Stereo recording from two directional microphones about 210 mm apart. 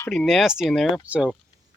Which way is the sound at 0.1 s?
Centre (ahead or behind).